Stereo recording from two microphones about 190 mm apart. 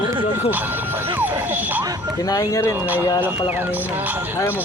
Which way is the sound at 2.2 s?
20° left (ahead or behind).